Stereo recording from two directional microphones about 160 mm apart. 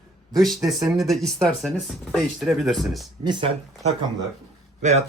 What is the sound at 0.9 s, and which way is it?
Speech, centre (ahead or behind).